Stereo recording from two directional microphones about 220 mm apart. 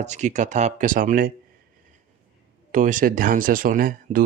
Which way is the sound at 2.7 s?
35° right (ahead or behind).